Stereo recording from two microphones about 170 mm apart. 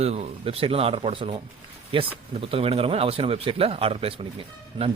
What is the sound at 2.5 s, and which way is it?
Speech, 35° right (ahead or behind).